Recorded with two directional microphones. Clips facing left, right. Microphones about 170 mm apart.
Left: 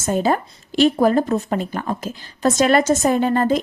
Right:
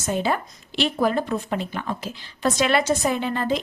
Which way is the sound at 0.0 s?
45° left (ahead or behind).